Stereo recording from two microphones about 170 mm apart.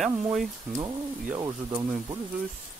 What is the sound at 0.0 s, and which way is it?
Speech, centre (ahead or behind).